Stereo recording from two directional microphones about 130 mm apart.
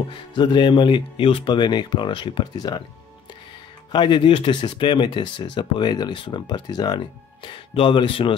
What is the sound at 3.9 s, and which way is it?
Speech, 35° left (ahead or behind).